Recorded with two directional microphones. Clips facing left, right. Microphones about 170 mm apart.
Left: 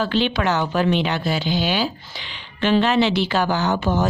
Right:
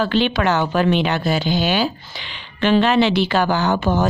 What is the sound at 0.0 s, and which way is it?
Speech, 60° right (ahead or behind).